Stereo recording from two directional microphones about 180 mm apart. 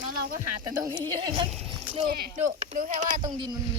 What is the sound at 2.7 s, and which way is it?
Speech, 45° right (ahead or behind).